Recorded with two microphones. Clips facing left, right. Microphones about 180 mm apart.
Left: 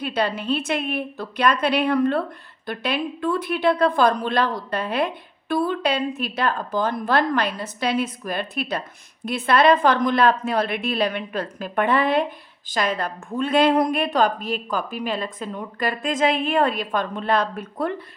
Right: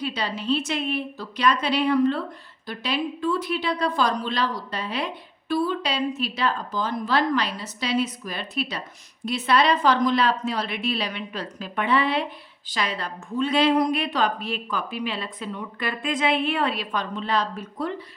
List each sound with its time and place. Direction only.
0.0 s a woman's voice: 55° left (ahead or behind)